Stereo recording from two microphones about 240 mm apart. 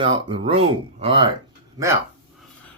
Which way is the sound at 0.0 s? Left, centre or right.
Right.